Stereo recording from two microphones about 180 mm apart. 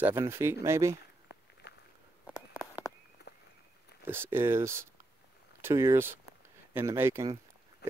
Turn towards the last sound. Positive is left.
turn(degrees=-15)  # may be behind; listen again after turning